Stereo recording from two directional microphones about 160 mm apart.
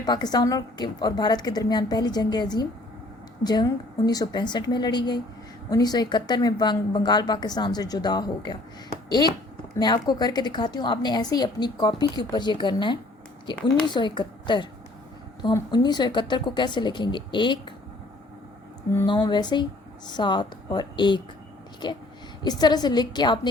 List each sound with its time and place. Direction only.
0.0 s a woman's voice: 25° left (ahead or behind)
19.0 s a woman's voice: 30° left (ahead or behind)